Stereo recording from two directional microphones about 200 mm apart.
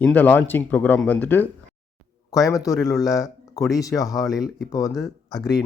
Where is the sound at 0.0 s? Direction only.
5° left (ahead or behind).